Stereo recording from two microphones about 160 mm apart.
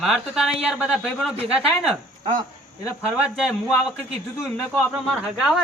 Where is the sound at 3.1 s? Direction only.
5° right (ahead or behind).